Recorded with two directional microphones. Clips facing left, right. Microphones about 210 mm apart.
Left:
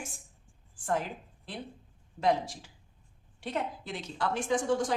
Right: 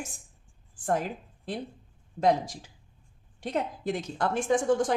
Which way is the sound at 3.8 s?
45° right (ahead or behind).